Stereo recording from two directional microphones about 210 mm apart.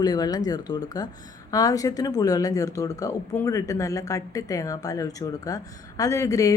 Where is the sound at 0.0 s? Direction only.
20° left (ahead or behind).